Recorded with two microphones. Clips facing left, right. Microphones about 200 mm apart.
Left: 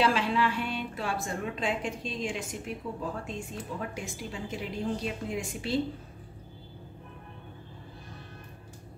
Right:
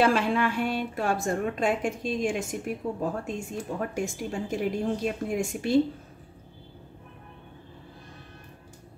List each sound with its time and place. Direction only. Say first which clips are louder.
0.0 s a woman's voice: right 3 dB; 50° right (ahead or behind)